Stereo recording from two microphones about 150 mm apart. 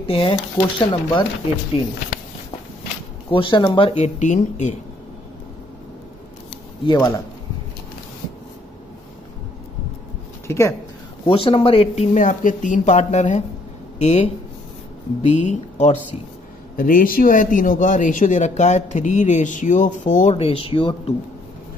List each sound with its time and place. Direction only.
0.0 s speech: 40° left (ahead or behind)
3.3 s speech: 35° left (ahead or behind)
4.2 s speech: 55° left (ahead or behind)
6.8 s speech: 25° left (ahead or behind)
10.4 s speech: 15° left (ahead or behind)
11.2 s speech: 40° left (ahead or behind)
16.7 s speech: 65° left (ahead or behind); by 20.9 s 40° left (ahead or behind)